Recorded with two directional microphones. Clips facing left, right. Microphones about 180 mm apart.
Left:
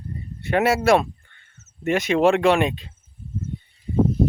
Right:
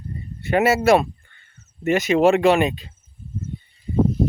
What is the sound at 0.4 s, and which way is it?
Speech, centre (ahead or behind).